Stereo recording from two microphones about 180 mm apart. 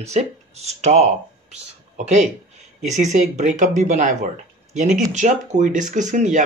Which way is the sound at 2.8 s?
40° right (ahead or behind).